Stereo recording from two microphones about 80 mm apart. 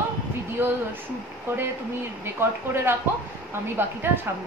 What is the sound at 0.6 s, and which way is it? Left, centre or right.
Speech, right.